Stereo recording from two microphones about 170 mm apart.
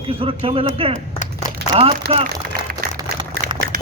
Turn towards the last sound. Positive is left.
turn(degrees=-25)  # may be behind; listen again after turning